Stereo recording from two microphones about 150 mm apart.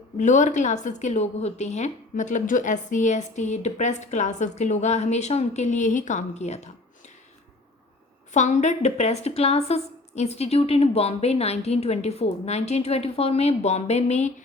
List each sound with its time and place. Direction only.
0.2 s a woman's voice: 55° left (ahead or behind)
8.3 s a woman's voice: 50° left (ahead or behind)